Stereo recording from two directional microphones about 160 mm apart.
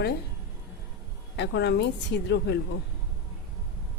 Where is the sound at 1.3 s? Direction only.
90° left.